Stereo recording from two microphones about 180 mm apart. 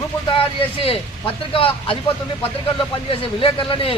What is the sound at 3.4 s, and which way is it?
Speech, 30° left (ahead or behind).